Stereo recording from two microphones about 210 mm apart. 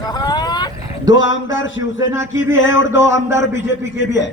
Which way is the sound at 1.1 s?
65° left (ahead or behind).